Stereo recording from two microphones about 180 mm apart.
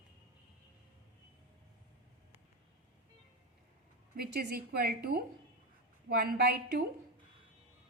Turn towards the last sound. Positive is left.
turn(degrees=-65)  # may be behind; listen again after turning